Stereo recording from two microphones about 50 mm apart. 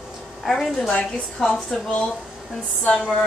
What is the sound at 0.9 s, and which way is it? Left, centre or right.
A woman's voice, left.